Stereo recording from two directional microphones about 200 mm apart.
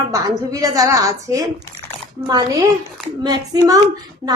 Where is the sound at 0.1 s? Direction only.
15° right (ahead or behind).